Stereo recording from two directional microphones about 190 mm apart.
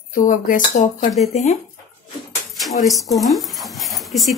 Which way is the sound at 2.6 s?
Centre (ahead or behind).